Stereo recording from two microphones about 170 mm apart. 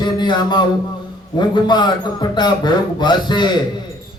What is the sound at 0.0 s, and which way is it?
Mantra, 25° left (ahead or behind).